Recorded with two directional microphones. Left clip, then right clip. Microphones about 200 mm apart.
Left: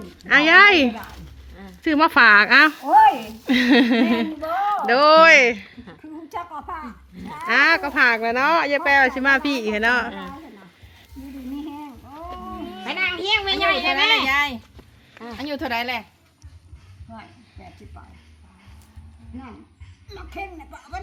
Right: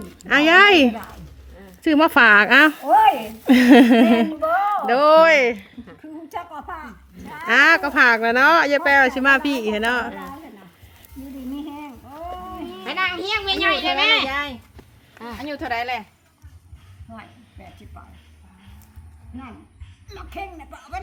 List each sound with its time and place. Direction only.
0.2 s speech: 25° right (ahead or behind)
4.4 s speech: 15° right (ahead or behind)
6.0 s a sound: 10° right (ahead or behind)
7.3 s speech: 20° right (ahead or behind)
11.5 s livestock: 5° right (ahead or behind)
12.8 s a child's voice: 40° left (ahead or behind)
15.4 s speech: 50° left (ahead or behind)
20.1 s speech: 10° right (ahead or behind)